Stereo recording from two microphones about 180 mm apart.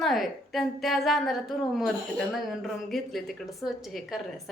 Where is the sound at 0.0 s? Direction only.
Centre (ahead or behind).